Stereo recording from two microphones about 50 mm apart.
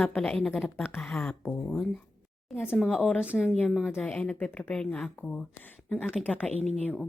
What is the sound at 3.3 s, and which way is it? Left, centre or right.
Speech, centre.